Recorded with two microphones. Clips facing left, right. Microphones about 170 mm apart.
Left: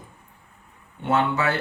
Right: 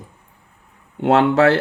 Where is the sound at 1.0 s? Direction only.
85° right.